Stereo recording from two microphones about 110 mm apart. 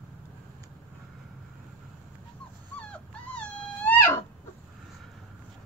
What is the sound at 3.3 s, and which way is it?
Wail, 15° left (ahead or behind).